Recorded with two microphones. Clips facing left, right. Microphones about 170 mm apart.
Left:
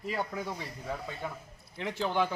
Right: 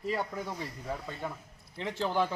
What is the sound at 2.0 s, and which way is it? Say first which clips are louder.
Speech: even; centre (ahead or behind).